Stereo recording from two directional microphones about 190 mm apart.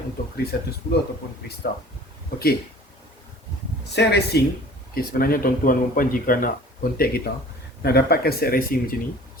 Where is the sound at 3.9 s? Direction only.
60° left (ahead or behind).